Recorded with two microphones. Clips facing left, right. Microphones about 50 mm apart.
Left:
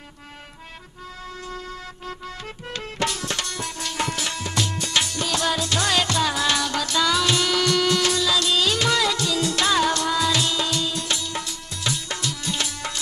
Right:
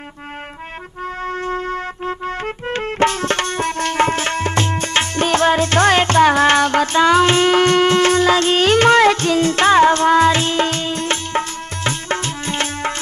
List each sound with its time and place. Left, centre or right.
1.2 s music: right